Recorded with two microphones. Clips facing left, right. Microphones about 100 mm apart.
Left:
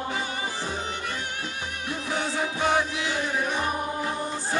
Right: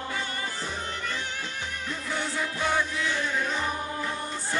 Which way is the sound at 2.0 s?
70° left (ahead or behind).